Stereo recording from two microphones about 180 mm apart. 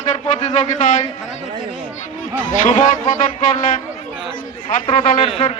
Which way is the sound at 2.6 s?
45° left (ahead or behind).